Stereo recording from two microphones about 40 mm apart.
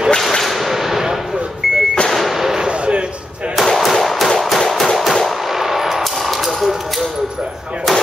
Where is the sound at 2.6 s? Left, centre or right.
Right.